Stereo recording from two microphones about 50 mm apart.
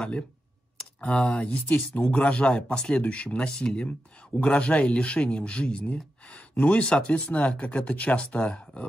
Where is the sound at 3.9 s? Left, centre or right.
Left.